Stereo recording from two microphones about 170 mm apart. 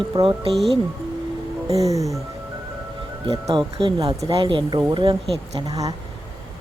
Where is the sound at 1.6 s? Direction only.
20° right (ahead or behind).